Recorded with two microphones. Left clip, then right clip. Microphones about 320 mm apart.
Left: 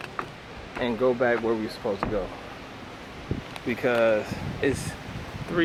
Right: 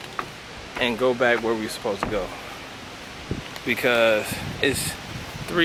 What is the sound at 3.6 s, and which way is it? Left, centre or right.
Speech, centre.